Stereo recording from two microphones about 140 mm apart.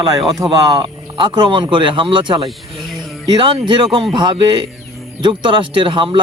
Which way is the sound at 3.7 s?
30° right (ahead or behind).